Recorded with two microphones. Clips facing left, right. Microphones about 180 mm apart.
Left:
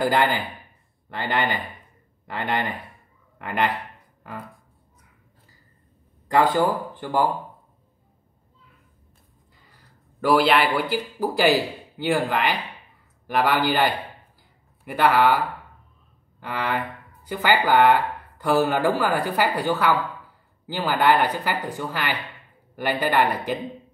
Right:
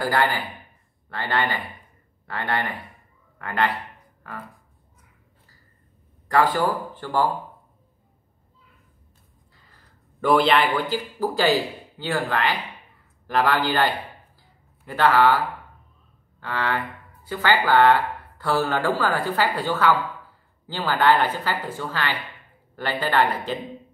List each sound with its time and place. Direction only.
0.0 s a man's voice: 20° left (ahead or behind)
6.2 s speech: 20° left (ahead or behind)
10.2 s speech: 5° left (ahead or behind)
12.0 s speech: 15° left (ahead or behind)